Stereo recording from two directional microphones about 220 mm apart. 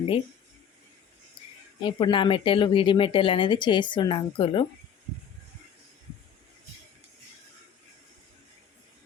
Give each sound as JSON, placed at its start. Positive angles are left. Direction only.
{"t": 1.8, "sound": "a woman's voice", "side_deg": 20}